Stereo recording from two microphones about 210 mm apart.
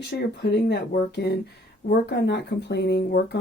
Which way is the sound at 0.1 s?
45° left (ahead or behind).